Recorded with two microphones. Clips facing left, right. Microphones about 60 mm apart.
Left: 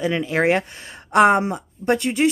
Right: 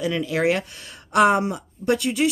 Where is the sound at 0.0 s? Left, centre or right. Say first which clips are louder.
Left 2 dB; left.